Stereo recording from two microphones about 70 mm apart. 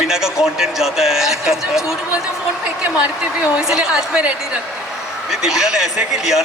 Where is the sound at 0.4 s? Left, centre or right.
Centre.